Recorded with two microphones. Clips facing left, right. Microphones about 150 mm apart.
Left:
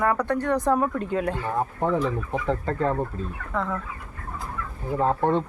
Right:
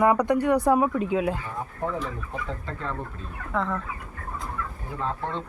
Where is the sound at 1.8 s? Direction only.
65° left (ahead or behind).